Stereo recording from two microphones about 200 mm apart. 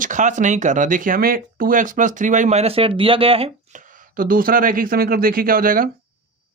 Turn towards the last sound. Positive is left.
turn(degrees=-45)  # may be behind; listen again after turning